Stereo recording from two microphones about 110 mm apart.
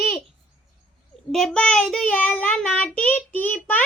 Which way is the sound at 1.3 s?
5° left (ahead or behind).